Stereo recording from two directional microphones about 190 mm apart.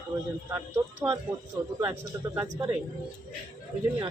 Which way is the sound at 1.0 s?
5° right (ahead or behind).